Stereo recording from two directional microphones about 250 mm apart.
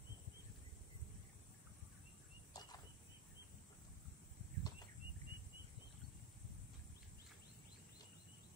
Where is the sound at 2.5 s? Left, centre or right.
Centre.